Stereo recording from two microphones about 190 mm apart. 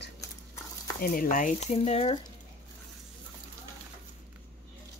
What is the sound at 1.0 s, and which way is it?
Speech, 45° left (ahead or behind).